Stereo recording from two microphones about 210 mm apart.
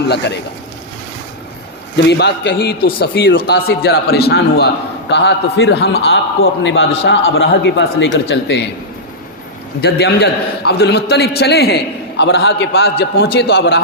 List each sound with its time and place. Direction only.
2.0 s a man's voice: 55° left (ahead or behind)
9.8 s a man's voice: 50° left (ahead or behind)